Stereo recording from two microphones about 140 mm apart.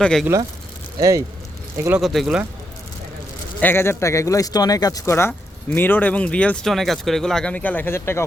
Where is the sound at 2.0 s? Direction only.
Centre (ahead or behind).